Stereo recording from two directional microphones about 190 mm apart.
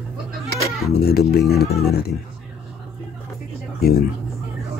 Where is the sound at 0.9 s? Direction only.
55° left (ahead or behind).